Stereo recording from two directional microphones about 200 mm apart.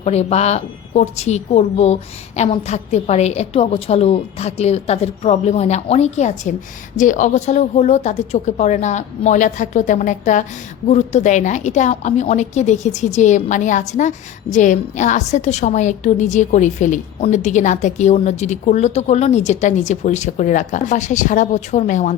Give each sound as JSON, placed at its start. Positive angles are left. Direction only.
{"t": 0.0, "sound": "a woman's voice", "side_deg": 30}